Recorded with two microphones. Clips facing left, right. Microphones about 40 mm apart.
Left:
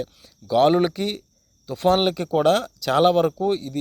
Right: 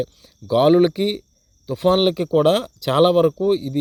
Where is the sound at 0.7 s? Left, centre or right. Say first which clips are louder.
Right 5 dB; centre.